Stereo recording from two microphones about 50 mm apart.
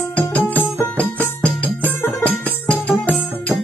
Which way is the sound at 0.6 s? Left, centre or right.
Left.